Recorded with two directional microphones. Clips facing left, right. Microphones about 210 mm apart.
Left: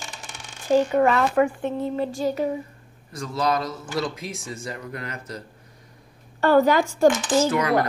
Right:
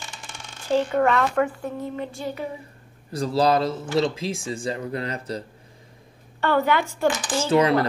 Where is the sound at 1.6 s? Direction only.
30° left (ahead or behind).